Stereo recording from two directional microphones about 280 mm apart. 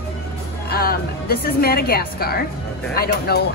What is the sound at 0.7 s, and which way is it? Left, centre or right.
A woman's voice, left.